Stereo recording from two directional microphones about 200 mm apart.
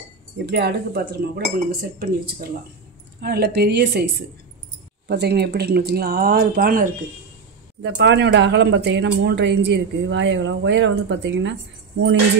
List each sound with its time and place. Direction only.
0.5 s speech: 55° right (ahead or behind)
7.8 s speech: 60° right (ahead or behind)